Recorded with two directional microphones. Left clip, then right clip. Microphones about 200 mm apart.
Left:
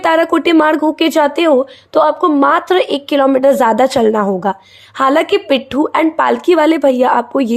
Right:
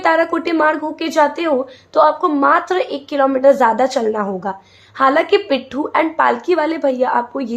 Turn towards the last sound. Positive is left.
turn(degrees=40)  # may be behind; listen again after turning